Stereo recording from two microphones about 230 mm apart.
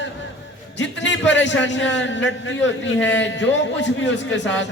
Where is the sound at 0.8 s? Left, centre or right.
Left.